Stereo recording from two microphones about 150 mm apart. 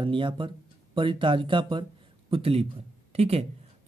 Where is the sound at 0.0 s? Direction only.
35° right (ahead or behind).